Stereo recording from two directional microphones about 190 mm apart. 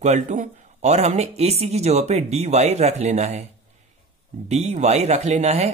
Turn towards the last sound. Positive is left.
turn(degrees=-35)  # may be behind; listen again after turning